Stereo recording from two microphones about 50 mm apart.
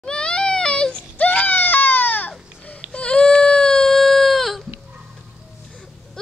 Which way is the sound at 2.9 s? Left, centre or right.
Left.